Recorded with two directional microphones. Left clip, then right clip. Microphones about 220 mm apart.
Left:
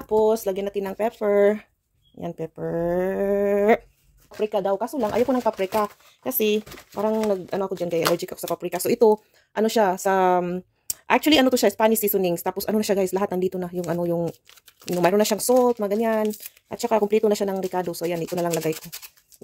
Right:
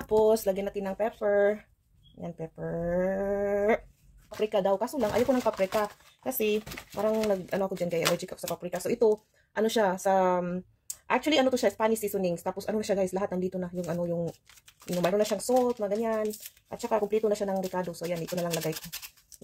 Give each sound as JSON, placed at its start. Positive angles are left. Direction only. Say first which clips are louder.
{"t": 0.1, "sound": "speech", "louder": "left 3 dB", "side_deg": 25}
{"t": 4.4, "sound": "speech", "louder": "left 3 dB", "side_deg": 30}
{"t": 5.6, "sound": "speech", "louder": "left 4 dB", "side_deg": 40}
{"t": 18.7, "sound": "speech", "louder": "left 7 dB", "side_deg": 10}